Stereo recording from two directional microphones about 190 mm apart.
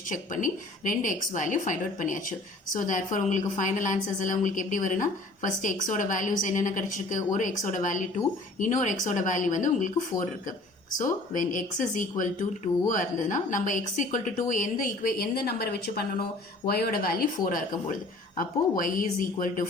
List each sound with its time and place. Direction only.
0.1 s a woman's voice: 45° left (ahead or behind)